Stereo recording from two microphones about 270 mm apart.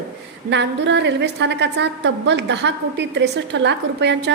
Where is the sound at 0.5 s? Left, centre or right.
Right.